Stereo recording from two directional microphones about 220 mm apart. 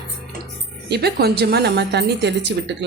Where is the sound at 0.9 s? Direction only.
45° right (ahead or behind).